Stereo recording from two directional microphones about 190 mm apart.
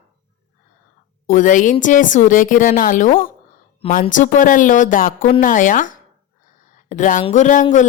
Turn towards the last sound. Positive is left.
turn(degrees=40)  # may be behind; listen again after turning